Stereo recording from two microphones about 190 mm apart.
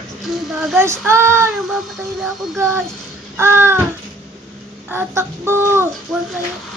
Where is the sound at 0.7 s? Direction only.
15° right (ahead or behind).